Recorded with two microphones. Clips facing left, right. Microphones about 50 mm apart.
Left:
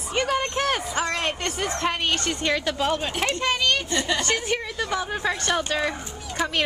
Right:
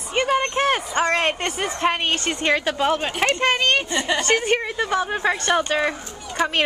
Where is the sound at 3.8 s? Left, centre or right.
Centre.